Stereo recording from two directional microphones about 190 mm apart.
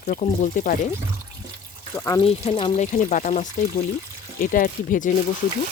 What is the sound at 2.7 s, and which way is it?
Speech, 40° left (ahead or behind).